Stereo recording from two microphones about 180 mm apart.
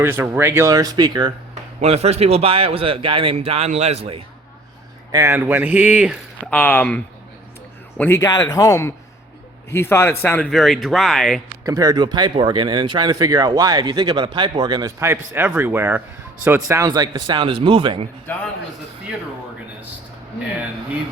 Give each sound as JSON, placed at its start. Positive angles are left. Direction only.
{"t": 0.0, "sound": "a man's voice", "side_deg": -15}
{"t": 1.8, "sound": "a man's voice", "side_deg": -35}
{"t": 5.1, "sound": "a man's voice", "side_deg": -15}
{"t": 6.5, "sound": "speech", "side_deg": 10}
{"t": 11.6, "sound": "speech", "side_deg": -20}